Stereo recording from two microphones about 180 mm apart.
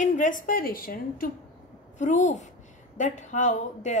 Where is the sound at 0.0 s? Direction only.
45° left (ahead or behind).